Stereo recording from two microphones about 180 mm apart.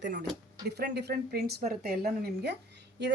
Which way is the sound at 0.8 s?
65° right (ahead or behind).